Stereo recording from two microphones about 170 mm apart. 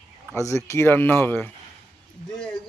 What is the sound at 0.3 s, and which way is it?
A man's voice, 15° left (ahead or behind).